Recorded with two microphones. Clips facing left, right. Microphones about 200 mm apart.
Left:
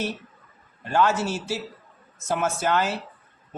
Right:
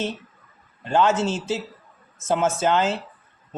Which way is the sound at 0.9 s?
20° right (ahead or behind).